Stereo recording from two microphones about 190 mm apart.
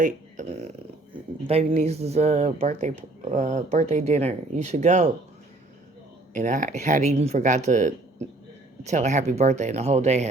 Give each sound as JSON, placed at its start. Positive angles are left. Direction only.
{"t": 0.0, "sound": "a sound", "side_deg": -40}
{"t": 1.5, "sound": "speech", "side_deg": -35}
{"t": 6.3, "sound": "speech", "side_deg": -40}